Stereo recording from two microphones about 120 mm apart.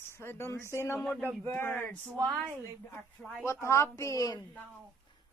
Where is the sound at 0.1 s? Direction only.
20° left (ahead or behind).